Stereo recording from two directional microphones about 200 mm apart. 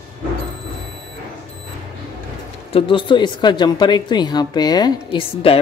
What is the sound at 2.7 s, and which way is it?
Speech, 25° left (ahead or behind).